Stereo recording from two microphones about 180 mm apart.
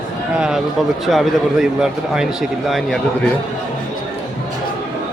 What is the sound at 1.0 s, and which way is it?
A man's voice, centre (ahead or behind).